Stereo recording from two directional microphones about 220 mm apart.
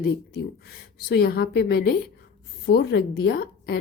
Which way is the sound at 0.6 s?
45° left (ahead or behind).